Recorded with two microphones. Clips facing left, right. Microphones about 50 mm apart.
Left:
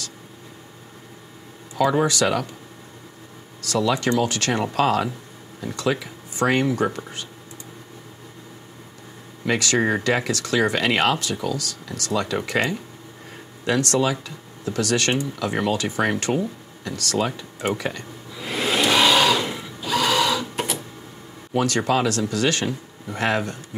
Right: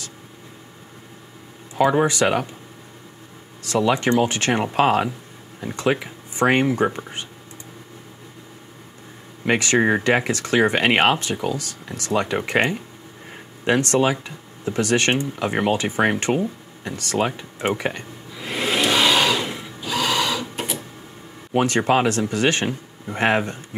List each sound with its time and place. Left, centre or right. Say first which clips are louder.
1.8 s speech: right 2 dB; right
3.6 s speech: right 2 dB; right
9.4 s speech: right 3 dB; right
18.3 s sewing machine: even; centre
21.5 s speech: right 2 dB; right